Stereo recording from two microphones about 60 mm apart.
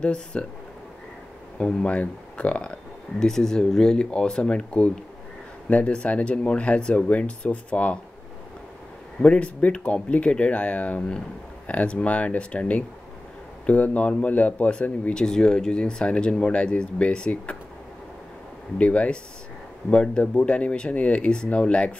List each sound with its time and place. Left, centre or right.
0.0 s speech: centre
1.6 s speech: centre
9.2 s speech: left
18.8 s speech: left